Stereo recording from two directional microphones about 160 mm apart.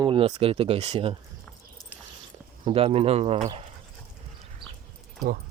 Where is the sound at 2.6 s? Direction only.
35° right (ahead or behind).